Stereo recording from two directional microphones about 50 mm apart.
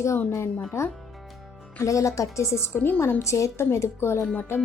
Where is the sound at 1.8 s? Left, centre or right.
Left.